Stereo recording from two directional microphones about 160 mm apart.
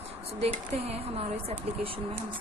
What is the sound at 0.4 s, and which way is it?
Speech, 40° right (ahead or behind).